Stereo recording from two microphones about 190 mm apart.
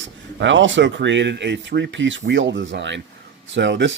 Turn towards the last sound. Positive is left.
turn(degrees=-70)  # may be behind; listen again after turning